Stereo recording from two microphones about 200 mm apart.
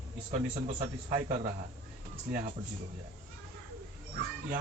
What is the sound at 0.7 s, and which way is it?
Speech, 40° right (ahead or behind).